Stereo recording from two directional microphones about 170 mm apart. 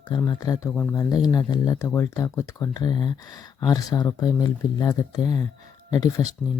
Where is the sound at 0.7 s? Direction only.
10° left (ahead or behind).